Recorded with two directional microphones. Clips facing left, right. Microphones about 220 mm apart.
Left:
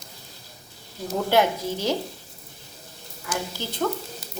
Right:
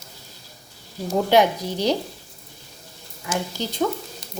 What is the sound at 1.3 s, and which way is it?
Speech, 15° right (ahead or behind).